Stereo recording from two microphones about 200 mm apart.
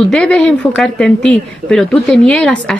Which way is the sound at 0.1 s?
5° left (ahead or behind).